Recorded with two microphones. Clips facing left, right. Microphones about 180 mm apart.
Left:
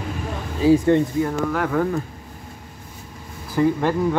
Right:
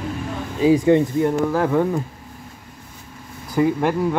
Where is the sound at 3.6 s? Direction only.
10° right (ahead or behind).